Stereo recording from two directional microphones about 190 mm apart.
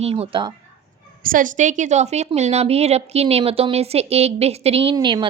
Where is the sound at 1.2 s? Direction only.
45° right (ahead or behind).